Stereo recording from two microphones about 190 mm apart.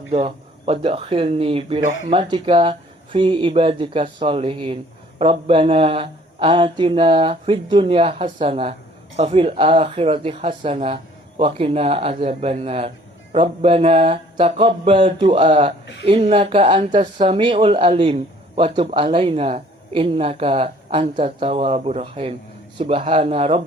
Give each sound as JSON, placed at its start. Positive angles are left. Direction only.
{"t": 0.1, "sound": "a man's voice", "side_deg": -30}